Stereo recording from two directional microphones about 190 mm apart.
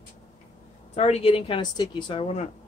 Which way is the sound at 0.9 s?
35° left (ahead or behind).